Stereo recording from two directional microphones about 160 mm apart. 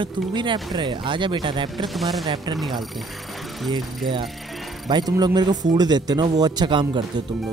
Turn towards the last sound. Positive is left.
turn(degrees=-30)  # may be behind; listen again after turning